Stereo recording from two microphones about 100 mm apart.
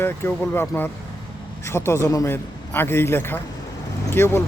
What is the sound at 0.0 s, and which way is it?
A man's voice, 25° left (ahead or behind).